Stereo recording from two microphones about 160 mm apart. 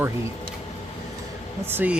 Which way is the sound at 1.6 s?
10° right (ahead or behind).